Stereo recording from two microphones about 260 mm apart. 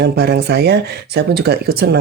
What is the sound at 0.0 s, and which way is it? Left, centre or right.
Speech, right.